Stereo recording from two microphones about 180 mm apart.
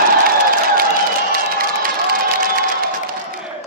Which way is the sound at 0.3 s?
55° right (ahead or behind).